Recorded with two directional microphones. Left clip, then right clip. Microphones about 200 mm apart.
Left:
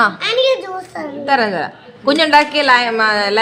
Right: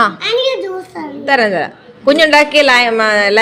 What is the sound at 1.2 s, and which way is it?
A woman's voice, 10° right (ahead or behind).